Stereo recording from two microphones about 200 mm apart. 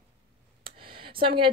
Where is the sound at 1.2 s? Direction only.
25° right (ahead or behind).